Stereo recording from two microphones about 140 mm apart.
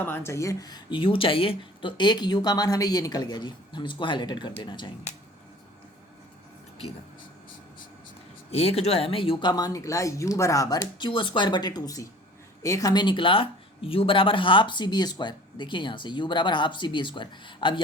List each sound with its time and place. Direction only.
0.0 s speech: 15° left (ahead or behind); by 4.9 s 35° left (ahead or behind)
8.4 s speech: 45° left (ahead or behind)